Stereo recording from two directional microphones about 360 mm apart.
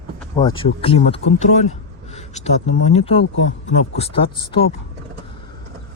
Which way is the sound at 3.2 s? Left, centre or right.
Left.